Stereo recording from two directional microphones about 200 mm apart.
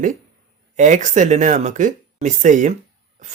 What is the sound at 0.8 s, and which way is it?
Speech, 40° right (ahead or behind).